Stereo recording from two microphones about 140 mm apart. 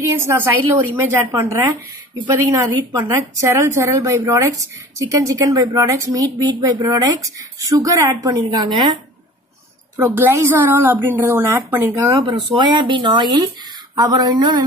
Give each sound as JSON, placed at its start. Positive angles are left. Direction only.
{"t": 0.0, "sound": "a woman's voice", "side_deg": -20}
{"t": 9.9, "sound": "a woman's voice", "side_deg": -15}
{"t": 12.1, "sound": "speech", "side_deg": -35}